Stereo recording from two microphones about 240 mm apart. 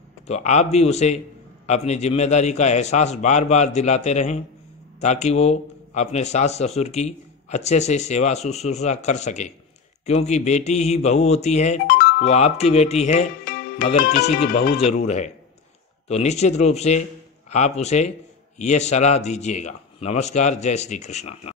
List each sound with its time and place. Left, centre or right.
0.3 s speech: left